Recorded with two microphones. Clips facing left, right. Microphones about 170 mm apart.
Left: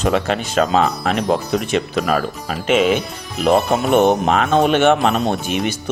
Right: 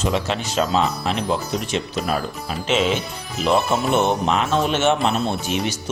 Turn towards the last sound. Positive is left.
turn(degrees=55)  # may be behind; listen again after turning